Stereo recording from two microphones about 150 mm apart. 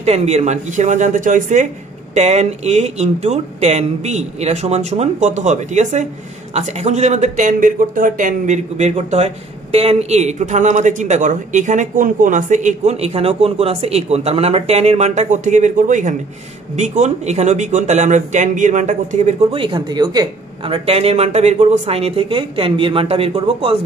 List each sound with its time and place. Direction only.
0.0 s speech: 45° right (ahead or behind)
19.5 s speech: 35° right (ahead or behind)
20.7 s speech: 40° right (ahead or behind)